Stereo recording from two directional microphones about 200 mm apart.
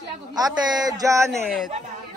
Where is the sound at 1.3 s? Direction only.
Centre (ahead or behind).